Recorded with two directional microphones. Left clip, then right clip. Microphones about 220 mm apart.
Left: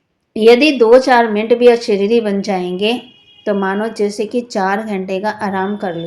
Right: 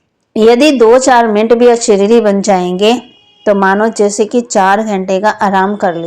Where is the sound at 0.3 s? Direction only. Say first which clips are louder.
Right 2 dB; 30° right (ahead or behind).